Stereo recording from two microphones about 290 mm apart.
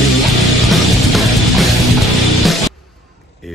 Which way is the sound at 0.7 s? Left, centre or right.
Centre.